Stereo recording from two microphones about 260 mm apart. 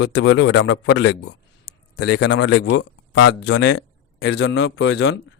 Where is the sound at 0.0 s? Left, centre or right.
Left.